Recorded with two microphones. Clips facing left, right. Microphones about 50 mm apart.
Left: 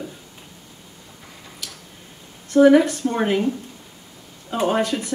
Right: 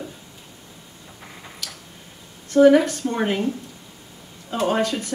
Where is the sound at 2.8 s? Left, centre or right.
Left.